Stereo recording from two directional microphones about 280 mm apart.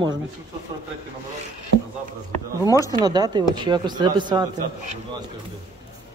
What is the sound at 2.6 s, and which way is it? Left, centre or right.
Speech, centre.